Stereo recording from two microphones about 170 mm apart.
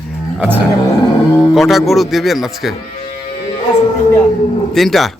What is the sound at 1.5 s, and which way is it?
A man's voice, centre (ahead or behind).